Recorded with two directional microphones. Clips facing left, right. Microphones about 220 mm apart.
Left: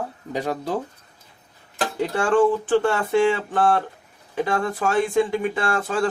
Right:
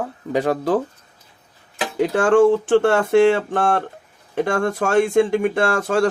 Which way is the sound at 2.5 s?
70° right (ahead or behind).